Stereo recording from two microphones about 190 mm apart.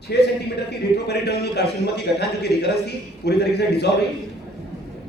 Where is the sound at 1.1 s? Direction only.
60° left (ahead or behind).